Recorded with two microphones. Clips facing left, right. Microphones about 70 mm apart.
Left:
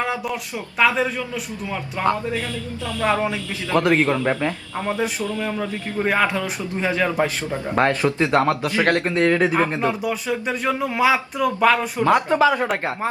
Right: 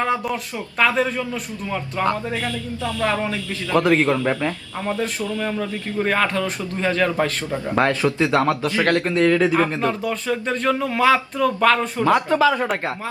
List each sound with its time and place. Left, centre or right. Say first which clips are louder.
0.0 s a sound: right 3 dB; centre
0.8 s speech: even; centre
3.0 s a man's voice: left 3 dB; left
3.8 s a man's voice: right 1 dB; centre
5.5 s speech: right 1 dB; centre